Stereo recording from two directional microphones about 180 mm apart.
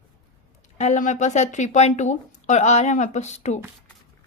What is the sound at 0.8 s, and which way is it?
A woman's voice, 40° left (ahead or behind).